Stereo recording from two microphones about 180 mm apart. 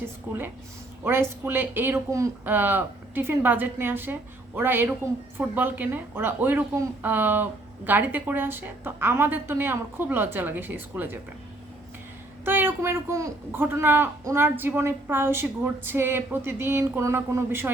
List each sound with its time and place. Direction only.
0.0 s a woman's voice: 10° right (ahead or behind)
12.5 s a woman's voice: 10° right (ahead or behind)